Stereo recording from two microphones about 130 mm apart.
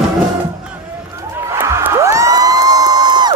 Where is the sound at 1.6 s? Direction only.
20° right (ahead or behind).